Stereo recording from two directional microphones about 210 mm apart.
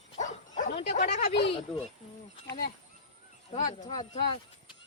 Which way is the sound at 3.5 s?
35° left (ahead or behind).